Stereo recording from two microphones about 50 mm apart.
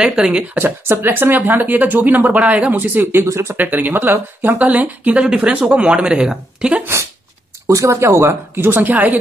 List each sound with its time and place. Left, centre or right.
0.0 s speech: centre
0.6 s speech: right
3.3 s speech: right
3.5 s speech: right
4.6 s speech: right
7.6 s speech: right
8.7 s speech: right